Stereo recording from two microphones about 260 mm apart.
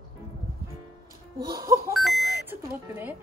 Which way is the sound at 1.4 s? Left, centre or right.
Centre.